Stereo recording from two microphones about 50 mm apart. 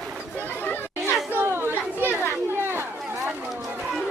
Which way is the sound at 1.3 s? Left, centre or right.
Right.